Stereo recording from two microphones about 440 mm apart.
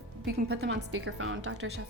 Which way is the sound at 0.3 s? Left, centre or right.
Right.